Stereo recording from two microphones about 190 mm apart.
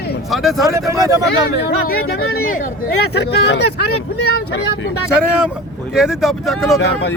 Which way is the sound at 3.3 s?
60° left (ahead or behind).